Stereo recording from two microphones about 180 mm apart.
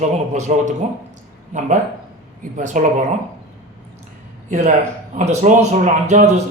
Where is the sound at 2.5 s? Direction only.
45° right (ahead or behind).